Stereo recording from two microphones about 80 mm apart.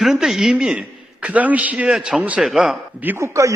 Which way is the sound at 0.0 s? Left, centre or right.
Centre.